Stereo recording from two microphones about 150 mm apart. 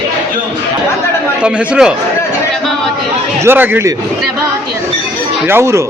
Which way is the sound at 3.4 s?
15° right (ahead or behind).